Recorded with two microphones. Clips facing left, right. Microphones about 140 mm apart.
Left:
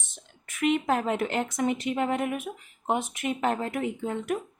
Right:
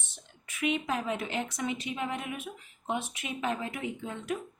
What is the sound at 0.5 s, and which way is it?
A woman's voice, 50° left (ahead or behind).